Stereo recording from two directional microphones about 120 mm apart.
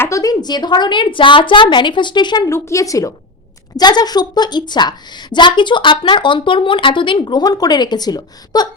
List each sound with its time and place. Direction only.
0.0 s a woman's voice: 30° left (ahead or behind)
2.5 s a woman's voice: 25° left (ahead or behind)